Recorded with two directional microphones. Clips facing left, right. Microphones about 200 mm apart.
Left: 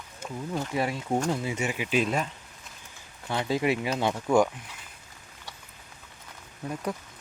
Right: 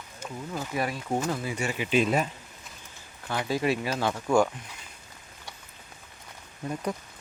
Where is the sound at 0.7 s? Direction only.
25° left (ahead or behind).